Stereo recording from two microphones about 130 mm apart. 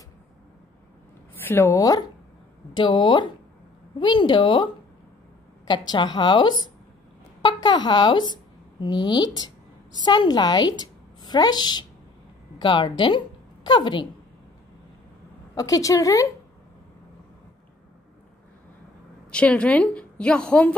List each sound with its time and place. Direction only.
1.3 s speech: 15° left (ahead or behind)
1.8 s a woman's voice: 30° left (ahead or behind)
5.7 s a woman's voice: 35° left (ahead or behind)
15.5 s a woman's voice: 25° left (ahead or behind)
19.3 s a woman's voice: 10° left (ahead or behind)